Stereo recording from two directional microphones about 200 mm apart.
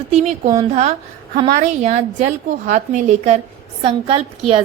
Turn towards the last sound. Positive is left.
turn(degrees=-30)  # may be behind; listen again after turning